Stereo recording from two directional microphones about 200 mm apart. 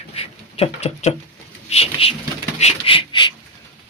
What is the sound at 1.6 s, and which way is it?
Bird, 30° left (ahead or behind).